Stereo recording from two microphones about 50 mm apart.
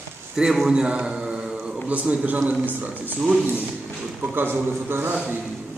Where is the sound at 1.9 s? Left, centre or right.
Right.